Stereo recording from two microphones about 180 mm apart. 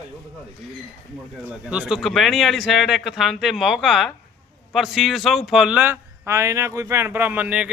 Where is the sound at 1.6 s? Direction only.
5° right (ahead or behind).